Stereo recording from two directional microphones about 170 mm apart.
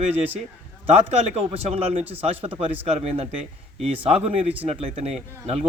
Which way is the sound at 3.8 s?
35° right (ahead or behind).